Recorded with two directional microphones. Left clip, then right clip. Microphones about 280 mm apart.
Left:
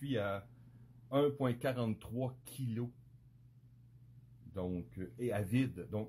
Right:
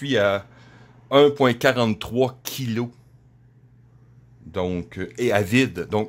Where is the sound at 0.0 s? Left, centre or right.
Right.